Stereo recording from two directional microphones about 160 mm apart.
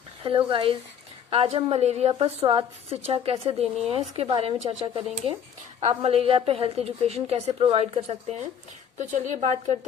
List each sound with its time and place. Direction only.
0.2 s a woman's voice: 35° right (ahead or behind)